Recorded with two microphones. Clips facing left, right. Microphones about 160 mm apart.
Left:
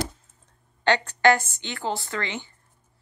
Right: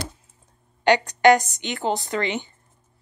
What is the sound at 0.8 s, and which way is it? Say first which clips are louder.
A woman's voice: right 4 dB; 15° right (ahead or behind).